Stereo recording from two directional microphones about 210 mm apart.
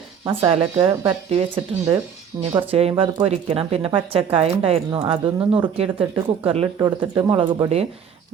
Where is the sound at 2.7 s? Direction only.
25° right (ahead or behind).